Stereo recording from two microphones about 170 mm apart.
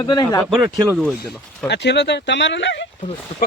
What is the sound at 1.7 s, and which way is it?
Speech, 85° left.